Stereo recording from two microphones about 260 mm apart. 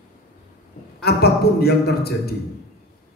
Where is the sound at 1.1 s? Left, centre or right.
Left.